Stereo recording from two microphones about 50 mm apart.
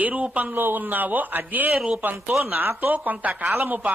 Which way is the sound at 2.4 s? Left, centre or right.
Right.